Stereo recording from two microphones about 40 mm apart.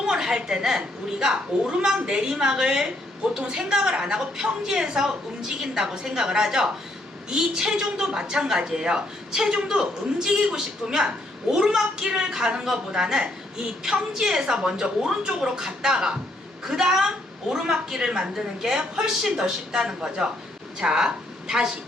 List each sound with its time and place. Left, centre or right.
0.0 s a sound: centre
1.5 s a woman's voice: right
9.3 s a woman's voice: centre
14.4 s a woman's voice: right